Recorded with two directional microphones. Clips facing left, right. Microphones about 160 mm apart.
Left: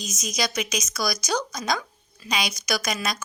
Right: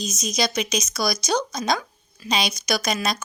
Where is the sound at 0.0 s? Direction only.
25° right (ahead or behind).